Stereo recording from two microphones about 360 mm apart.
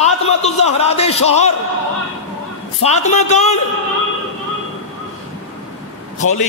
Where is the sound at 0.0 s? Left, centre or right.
Centre.